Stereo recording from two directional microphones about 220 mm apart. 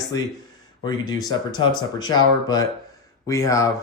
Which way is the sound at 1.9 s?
20° left (ahead or behind).